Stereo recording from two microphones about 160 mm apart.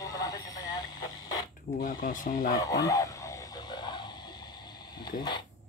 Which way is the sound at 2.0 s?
55° left (ahead or behind).